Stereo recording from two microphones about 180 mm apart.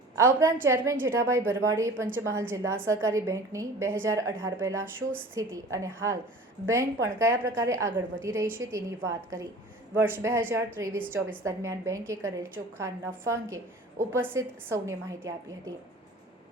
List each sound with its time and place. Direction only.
0.2 s a woman's voice: 15° right (ahead or behind)